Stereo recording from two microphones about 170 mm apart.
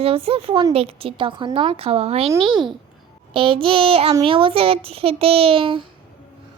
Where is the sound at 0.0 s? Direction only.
35° right (ahead or behind).